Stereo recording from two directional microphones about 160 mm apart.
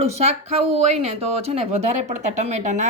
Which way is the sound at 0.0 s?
45° right (ahead or behind).